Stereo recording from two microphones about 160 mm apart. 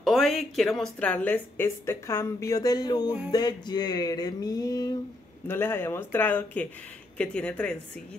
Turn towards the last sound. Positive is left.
turn(degrees=5)  # may be behind; listen again after turning